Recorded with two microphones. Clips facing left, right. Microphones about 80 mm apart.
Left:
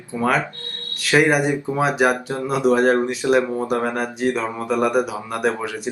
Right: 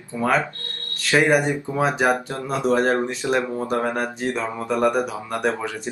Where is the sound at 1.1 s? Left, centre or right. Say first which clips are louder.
Left 1 dB; centre.